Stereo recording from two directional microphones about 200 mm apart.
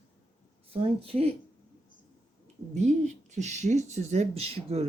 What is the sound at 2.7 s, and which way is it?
Speech, 35° right (ahead or behind).